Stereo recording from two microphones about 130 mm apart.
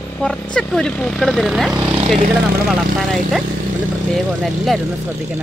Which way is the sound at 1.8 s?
45° right (ahead or behind).